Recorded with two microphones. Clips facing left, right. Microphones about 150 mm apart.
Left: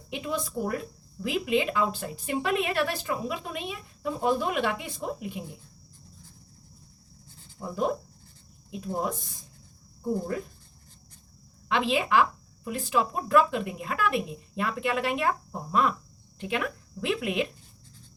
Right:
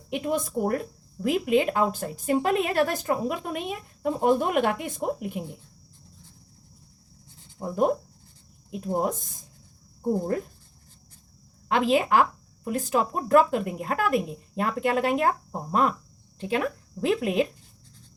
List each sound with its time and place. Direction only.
0.1 s speech: 50° right (ahead or behind)
7.6 s speech: 50° right (ahead or behind)
11.7 s speech: 45° right (ahead or behind)